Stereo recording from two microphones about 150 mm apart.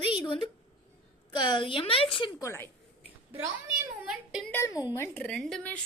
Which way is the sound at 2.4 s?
15° left (ahead or behind).